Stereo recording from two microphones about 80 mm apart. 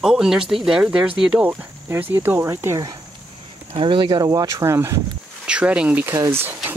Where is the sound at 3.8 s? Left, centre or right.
Right.